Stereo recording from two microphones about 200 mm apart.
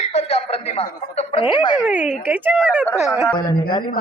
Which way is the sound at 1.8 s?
5° right (ahead or behind).